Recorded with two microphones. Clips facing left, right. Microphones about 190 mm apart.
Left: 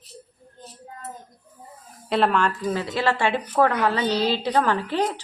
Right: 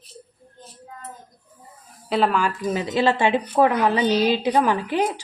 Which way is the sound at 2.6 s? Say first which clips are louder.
Right 3 dB; 20° right (ahead or behind).